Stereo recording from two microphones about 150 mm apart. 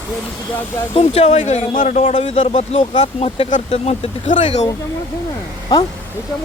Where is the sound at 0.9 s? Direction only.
45° left (ahead or behind).